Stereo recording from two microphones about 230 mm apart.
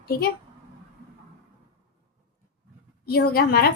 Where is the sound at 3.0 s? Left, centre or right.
Left.